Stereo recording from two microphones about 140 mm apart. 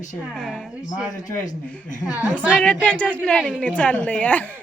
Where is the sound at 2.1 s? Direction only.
10° right (ahead or behind).